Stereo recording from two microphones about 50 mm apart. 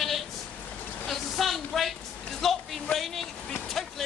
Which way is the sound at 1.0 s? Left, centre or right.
Centre.